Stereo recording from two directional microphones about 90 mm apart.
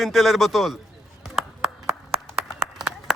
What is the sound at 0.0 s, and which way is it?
Speech, centre (ahead or behind).